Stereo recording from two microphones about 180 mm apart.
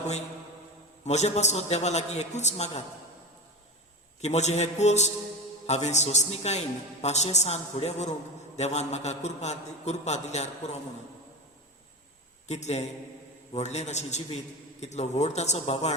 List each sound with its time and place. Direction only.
1.0 s a man's voice: 40° left (ahead or behind)
4.2 s a man's voice: 40° left (ahead or behind)
12.5 s a man's voice: 40° left (ahead or behind)